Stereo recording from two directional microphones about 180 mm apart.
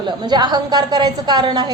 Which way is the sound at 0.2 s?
25° right (ahead or behind).